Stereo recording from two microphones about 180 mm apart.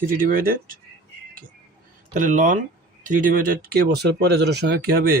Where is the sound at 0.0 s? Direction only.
50° right (ahead or behind).